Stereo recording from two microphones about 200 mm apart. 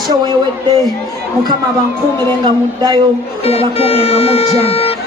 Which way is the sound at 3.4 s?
30° left (ahead or behind).